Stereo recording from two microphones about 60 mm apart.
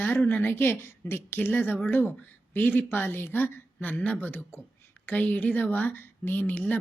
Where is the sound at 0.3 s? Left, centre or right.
Left.